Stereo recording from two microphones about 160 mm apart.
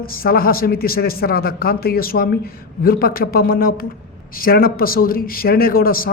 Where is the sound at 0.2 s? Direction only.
65° left (ahead or behind).